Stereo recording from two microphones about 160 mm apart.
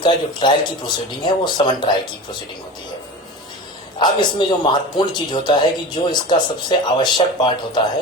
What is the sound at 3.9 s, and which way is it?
Speech, 30° left (ahead or behind).